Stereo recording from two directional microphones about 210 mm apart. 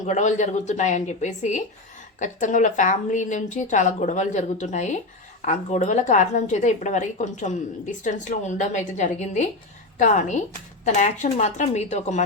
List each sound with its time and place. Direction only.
0.0 s a woman's voice: 35° left (ahead or behind)